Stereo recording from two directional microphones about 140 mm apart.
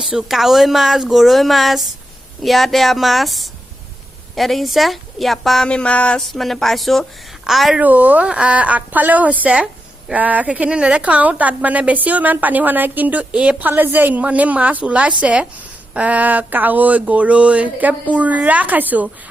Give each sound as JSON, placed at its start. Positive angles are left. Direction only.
{"t": 0.0, "sound": "a woman's voice", "side_deg": -5}
{"t": 7.8, "sound": "a woman's voice", "side_deg": -10}